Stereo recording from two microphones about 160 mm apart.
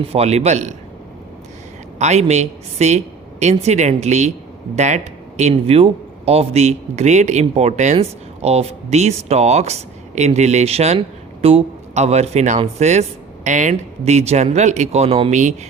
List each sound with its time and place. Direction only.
0.1 s speech: 40° right (ahead or behind)
2.0 s speech: 45° right (ahead or behind)